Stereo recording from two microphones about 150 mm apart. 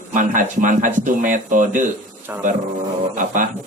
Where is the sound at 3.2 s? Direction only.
60° right (ahead or behind).